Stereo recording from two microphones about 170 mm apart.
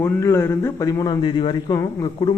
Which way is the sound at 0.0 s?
15° left (ahead or behind).